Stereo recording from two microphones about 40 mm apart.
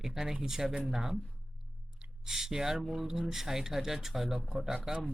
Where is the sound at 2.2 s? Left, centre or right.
Centre.